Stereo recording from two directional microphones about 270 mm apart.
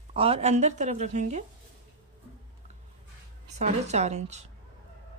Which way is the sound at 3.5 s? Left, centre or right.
Right.